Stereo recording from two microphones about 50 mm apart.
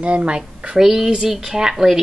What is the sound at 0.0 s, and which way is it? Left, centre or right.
Speech, right.